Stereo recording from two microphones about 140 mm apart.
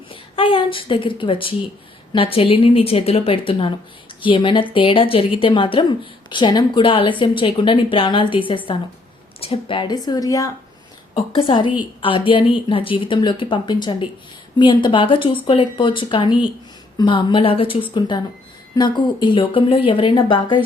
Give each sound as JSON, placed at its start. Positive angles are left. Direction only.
{"t": 0.1, "sound": "a woman's voice", "side_deg": 40}
{"t": 11.1, "sound": "a woman's voice", "side_deg": 40}